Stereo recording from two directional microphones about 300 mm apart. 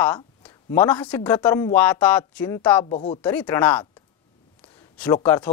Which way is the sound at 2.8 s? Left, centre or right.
Left.